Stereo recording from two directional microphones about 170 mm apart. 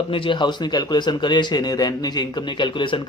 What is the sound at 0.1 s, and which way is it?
A man's voice, 30° left (ahead or behind).